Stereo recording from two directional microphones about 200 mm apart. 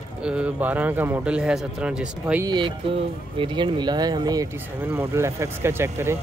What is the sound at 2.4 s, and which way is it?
Speech, 20° right (ahead or behind).